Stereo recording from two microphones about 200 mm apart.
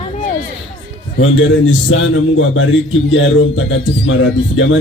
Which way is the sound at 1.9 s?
80° left.